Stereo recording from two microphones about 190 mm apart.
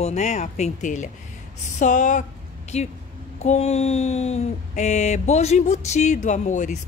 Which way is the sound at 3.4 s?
35° left (ahead or behind).